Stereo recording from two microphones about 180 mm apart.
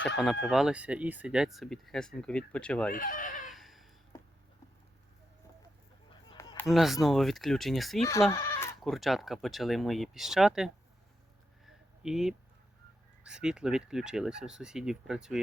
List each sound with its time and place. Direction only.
0.4 s speech: 5° right (ahead or behind)
2.9 s speech: 50° left (ahead or behind)
3.4 s a sound: centre (ahead or behind)
4.1 s a sound: 25° left (ahead or behind)
6.3 s a sound: 15° left (ahead or behind)
6.7 s speech: centre (ahead or behind)
8.3 s goat: 15° left (ahead or behind)
8.8 s speech: centre (ahead or behind)
12.0 s speech: 5° right (ahead or behind)